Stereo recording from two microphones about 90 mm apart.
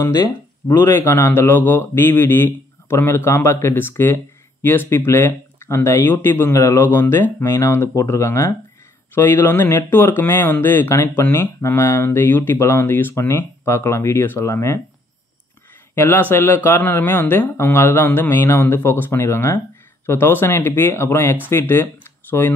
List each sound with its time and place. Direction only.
0.7 s a man's voice: 30° left (ahead or behind)
15.9 s a man's voice: 25° left (ahead or behind)